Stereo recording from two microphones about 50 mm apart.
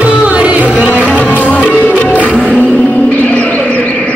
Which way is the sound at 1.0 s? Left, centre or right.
Left.